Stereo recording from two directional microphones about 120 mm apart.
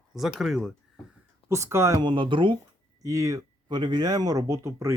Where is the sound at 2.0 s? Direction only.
40° right (ahead or behind).